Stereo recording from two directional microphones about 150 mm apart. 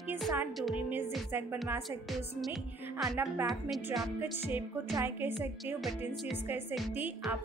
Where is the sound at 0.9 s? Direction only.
15° right (ahead or behind).